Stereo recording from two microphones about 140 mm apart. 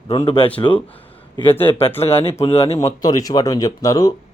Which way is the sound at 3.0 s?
25° left (ahead or behind).